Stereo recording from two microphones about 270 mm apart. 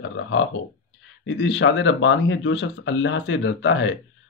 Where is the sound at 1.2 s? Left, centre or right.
Left.